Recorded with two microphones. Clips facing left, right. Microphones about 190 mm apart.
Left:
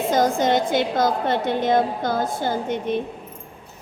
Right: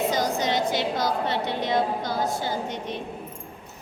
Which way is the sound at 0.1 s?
50° left (ahead or behind).